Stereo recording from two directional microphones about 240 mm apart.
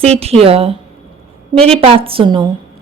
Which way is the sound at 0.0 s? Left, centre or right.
Right.